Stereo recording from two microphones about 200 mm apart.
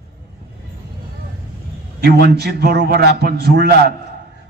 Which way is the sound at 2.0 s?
50° right (ahead or behind).